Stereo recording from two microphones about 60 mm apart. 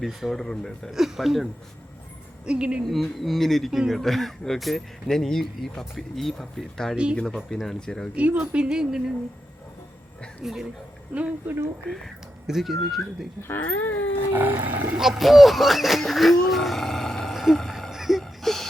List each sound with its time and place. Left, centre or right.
0.0 s speech: centre
0.4 s speech: centre
0.9 s speech: centre
2.4 s a woman's voice: centre
2.8 s speech: centre
6.9 s a woman's voice: centre
7.2 s speech: centre
8.1 s a woman's voice: right
10.4 s speech: centre
12.5 s speech: centre
13.6 s a sound: left
14.3 s a sound: right
14.9 s speech: centre
17.3 s a sound: centre